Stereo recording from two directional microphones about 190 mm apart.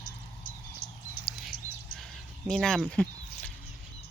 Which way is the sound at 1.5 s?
90° left.